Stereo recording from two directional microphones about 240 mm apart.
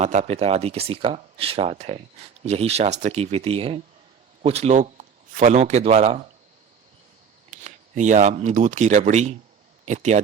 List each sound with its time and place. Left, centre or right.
0.0 s a man's voice: right
7.5 s speech: right